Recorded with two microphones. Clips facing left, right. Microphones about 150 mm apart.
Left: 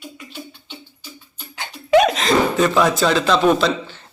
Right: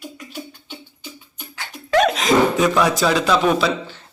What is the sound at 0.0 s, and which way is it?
Beatboxing, 5° right (ahead or behind).